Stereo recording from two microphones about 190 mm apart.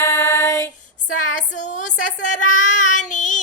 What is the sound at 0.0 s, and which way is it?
Female singing, 15° left (ahead or behind).